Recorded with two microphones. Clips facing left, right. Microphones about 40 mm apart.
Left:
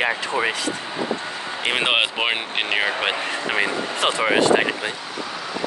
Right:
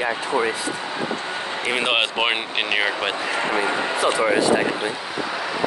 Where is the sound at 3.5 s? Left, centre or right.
Left.